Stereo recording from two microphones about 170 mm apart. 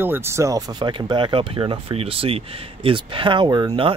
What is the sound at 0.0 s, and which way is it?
Speech, 15° right (ahead or behind).